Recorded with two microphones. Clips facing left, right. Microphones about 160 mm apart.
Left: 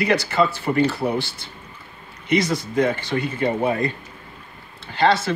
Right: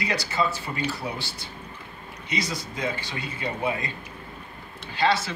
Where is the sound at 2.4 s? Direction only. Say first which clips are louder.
Left 10 dB; 55° left (ahead or behind).